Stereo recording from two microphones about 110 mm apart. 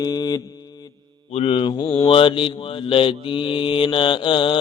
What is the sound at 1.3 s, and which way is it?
Mantra, 75° left (ahead or behind).